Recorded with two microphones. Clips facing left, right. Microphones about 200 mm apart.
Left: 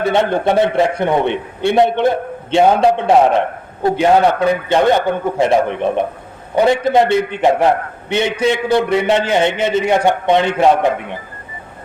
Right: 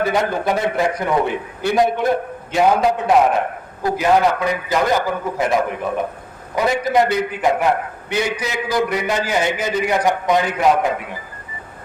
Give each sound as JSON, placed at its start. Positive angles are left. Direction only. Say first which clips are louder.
{"t": 0.0, "sound": "a man's voice", "louder": "left 4 dB", "side_deg": 25}